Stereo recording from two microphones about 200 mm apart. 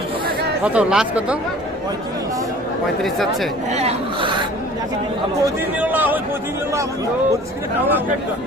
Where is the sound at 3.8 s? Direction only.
30° right (ahead or behind).